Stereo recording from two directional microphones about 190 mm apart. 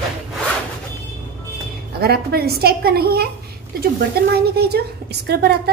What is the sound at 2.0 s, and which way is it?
A woman's voice, 55° right (ahead or behind).